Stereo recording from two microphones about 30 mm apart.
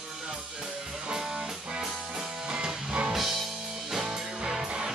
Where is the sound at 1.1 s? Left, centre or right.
Right.